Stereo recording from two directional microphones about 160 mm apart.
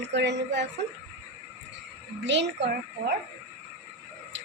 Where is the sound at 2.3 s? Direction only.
90° right.